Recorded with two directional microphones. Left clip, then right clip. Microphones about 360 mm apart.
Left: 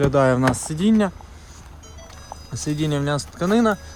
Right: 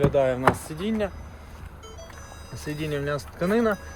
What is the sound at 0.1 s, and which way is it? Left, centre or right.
Speech, left.